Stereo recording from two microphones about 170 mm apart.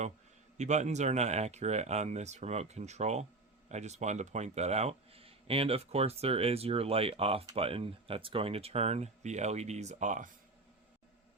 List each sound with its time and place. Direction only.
0.5 s a man's voice: 45° right (ahead or behind)